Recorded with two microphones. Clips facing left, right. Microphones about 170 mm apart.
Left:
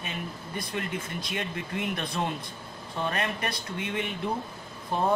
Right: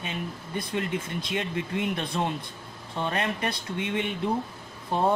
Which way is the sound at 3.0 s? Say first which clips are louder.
Right 2 dB; 25° right (ahead or behind).